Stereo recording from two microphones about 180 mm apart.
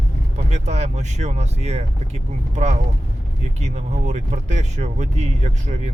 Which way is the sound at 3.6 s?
40° right (ahead or behind).